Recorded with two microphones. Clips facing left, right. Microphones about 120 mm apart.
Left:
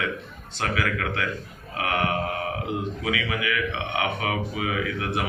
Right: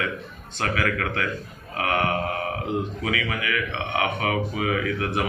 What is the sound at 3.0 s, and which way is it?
Speech, 15° left (ahead or behind).